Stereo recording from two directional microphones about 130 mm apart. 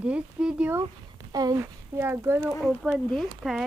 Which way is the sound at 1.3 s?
30° right (ahead or behind).